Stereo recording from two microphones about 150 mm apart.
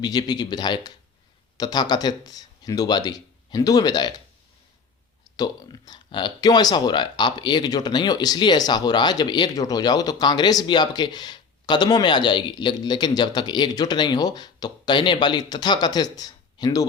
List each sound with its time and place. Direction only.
0.0 s speech: 25° left (ahead or behind)
5.4 s speech: 25° left (ahead or behind)